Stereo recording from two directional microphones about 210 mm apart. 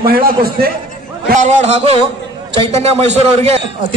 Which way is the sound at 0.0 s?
45° right (ahead or behind).